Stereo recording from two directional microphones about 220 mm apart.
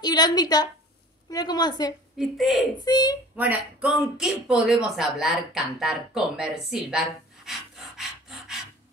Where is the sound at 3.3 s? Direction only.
5° right (ahead or behind).